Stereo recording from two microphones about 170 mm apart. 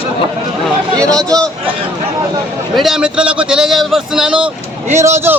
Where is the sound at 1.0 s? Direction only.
5° left (ahead or behind).